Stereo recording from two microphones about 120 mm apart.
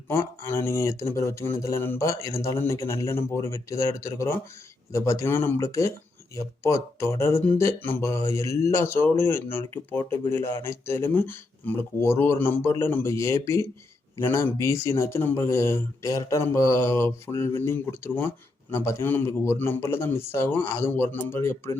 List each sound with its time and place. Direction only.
0.1 s speech: 20° left (ahead or behind)